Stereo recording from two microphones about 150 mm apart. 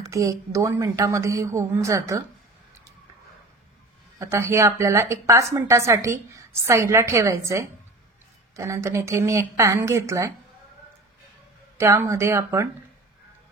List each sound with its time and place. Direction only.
0.0 s speech: 20° right (ahead or behind)
4.2 s speech: 15° right (ahead or behind)
11.8 s speech: 20° right (ahead or behind)